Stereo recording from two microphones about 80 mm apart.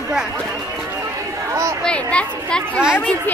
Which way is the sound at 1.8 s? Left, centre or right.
Centre.